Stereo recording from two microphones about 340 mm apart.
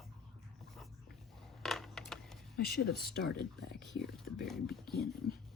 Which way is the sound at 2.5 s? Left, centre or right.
Left.